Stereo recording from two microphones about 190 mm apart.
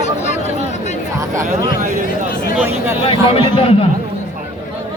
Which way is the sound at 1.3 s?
45° right (ahead or behind).